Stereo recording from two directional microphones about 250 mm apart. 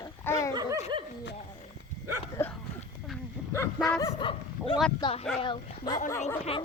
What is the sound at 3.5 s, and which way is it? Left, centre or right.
Speech, centre.